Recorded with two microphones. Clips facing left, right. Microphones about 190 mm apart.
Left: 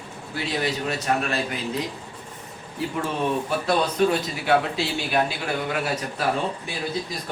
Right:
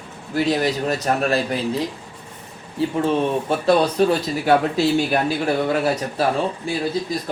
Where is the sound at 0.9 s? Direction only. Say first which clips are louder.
Right 5 dB; 40° right (ahead or behind).